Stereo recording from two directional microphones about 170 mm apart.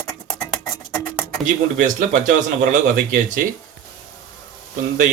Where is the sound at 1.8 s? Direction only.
50° right (ahead or behind).